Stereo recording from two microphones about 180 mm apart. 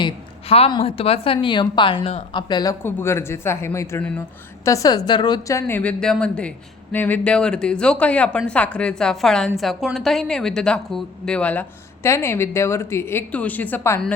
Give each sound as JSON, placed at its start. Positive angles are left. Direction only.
{"t": 0.0, "sound": "a woman's voice", "side_deg": 35}